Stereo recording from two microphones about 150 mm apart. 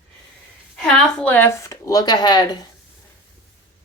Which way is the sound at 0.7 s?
Centre (ahead or behind).